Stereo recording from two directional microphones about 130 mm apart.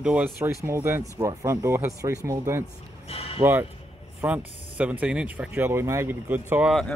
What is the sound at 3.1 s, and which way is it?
Speech, 50° left (ahead or behind).